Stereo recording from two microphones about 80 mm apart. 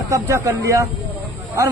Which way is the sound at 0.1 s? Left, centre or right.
Right.